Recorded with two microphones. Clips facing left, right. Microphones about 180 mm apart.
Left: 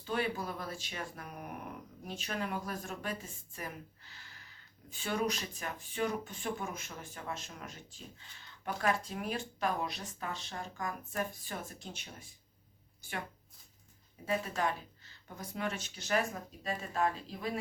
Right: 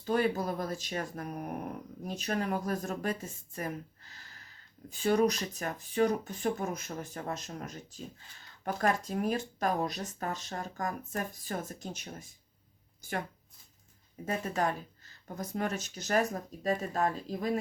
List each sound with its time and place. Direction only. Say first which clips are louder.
0.0 s speech: right 6 dB; 40° right (ahead or behind)
14.3 s speech: right 2 dB; 40° right (ahead or behind)